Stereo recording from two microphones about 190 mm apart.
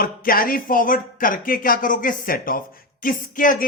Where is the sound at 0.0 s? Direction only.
50° left (ahead or behind).